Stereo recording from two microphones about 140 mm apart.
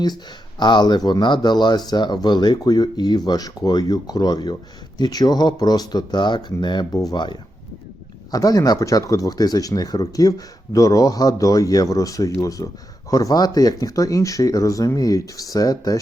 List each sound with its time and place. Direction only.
0.6 s speech: 30° left (ahead or behind)